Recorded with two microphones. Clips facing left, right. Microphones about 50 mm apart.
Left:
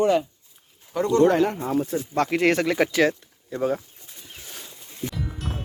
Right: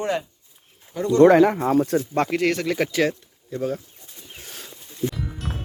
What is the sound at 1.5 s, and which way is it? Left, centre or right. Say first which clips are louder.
Speech: right 5 dB; right.